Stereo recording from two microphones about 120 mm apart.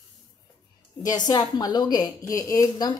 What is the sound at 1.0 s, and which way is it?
A woman's voice, 35° left (ahead or behind).